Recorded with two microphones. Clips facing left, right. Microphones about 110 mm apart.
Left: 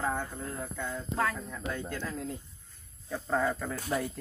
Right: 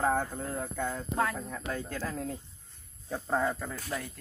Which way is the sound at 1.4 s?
35° right (ahead or behind).